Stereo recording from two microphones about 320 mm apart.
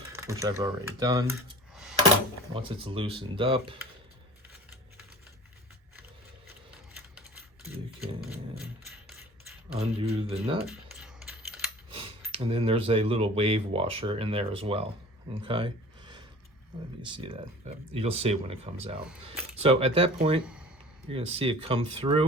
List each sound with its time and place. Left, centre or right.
0.1 s speech: centre
1.7 s coin: centre
2.6 s speech: centre
8.2 s a sound: centre
9.7 s speech: centre
10.7 s typing: centre
11.9 s speech: centre
15.4 s a sound: centre
17.1 s speech: centre
20.4 s speech: centre
21.1 s speech: centre